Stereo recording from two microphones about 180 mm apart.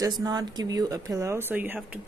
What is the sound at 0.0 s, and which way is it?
A woman's voice, 20° right (ahead or behind).